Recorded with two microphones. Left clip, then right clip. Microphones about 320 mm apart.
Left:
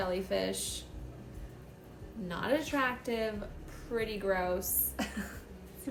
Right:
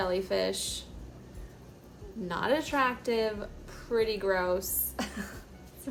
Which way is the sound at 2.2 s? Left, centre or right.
Centre.